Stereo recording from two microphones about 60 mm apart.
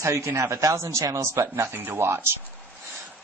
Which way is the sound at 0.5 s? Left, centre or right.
Right.